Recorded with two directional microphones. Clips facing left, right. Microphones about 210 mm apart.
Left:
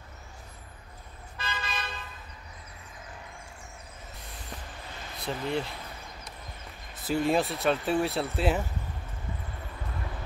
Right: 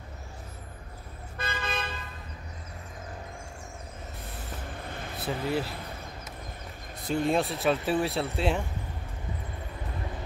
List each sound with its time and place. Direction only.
1.4 s toot: 55° right (ahead or behind)
5.2 s speech: 5° right (ahead or behind)
7.1 s speech: centre (ahead or behind)